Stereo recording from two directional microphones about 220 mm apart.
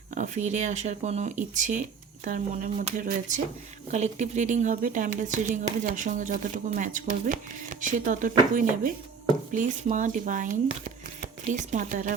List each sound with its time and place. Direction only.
0.1 s speech: 35° right (ahead or behind)